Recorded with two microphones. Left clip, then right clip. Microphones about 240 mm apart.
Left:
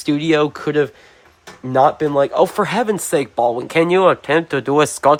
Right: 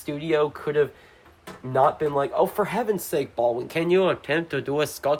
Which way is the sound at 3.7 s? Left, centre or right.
Left.